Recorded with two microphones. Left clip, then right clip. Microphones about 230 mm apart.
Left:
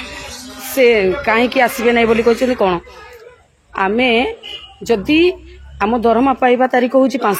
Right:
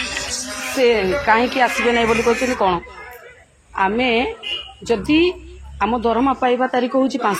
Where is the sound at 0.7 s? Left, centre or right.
Left.